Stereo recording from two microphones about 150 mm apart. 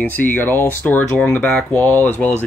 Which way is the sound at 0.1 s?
10° left (ahead or behind).